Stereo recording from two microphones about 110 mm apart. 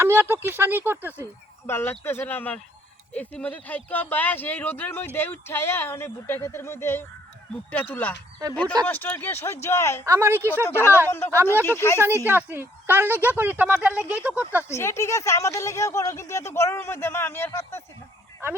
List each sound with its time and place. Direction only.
0.0 s speech: 20° right (ahead or behind)
1.6 s speech: 20° left (ahead or behind)
10.1 s speech: 20° right (ahead or behind)
10.5 s speech: 20° left (ahead or behind)
12.2 s speech: 15° right (ahead or behind)
14.7 s speech: 25° left (ahead or behind)